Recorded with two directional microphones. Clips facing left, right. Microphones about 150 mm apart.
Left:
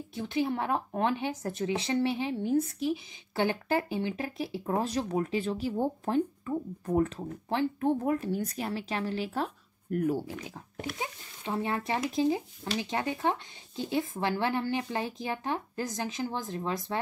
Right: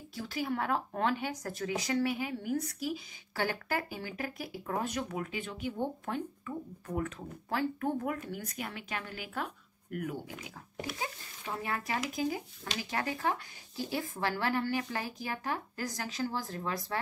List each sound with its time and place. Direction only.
0.1 s speech: 20° left (ahead or behind)